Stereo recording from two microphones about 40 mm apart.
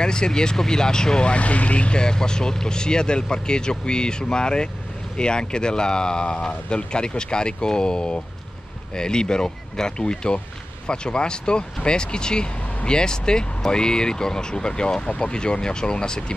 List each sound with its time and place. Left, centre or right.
0.0 s speech: centre